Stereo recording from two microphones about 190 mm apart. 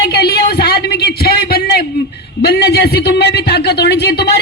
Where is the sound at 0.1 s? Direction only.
55° left (ahead or behind).